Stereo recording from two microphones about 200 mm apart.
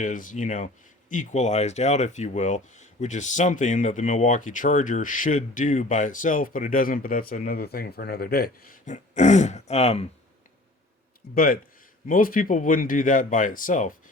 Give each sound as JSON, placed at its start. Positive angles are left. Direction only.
{"t": 0.0, "sound": "speech", "side_deg": 40}
{"t": 11.3, "sound": "speech", "side_deg": 45}